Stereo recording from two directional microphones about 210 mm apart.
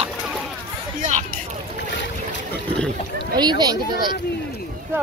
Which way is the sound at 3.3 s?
20° right (ahead or behind).